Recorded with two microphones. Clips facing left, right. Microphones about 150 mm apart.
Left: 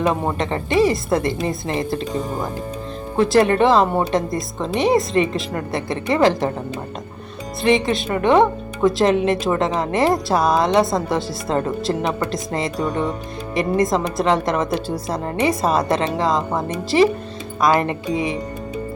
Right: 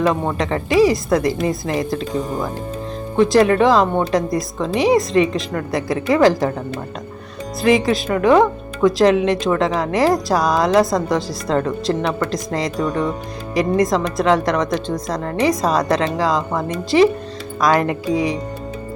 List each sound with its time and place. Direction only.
0.0 s speech: 5° left (ahead or behind)
7.6 s speech: centre (ahead or behind)